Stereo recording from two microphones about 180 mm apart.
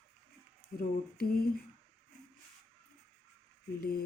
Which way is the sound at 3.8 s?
55° left (ahead or behind).